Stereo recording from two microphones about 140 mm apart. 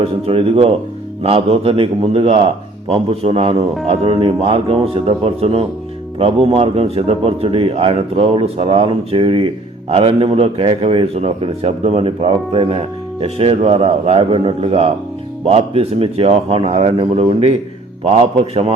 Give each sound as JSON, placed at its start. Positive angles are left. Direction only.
{"t": 0.0, "sound": "speech", "side_deg": -45}